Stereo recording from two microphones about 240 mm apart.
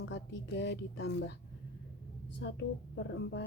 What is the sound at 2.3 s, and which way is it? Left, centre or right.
Speech, left.